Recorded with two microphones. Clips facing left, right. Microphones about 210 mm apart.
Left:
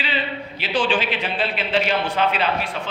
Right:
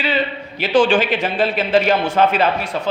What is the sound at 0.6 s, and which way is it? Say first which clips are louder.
A man's voice: right 8 dB; 45° right (ahead or behind).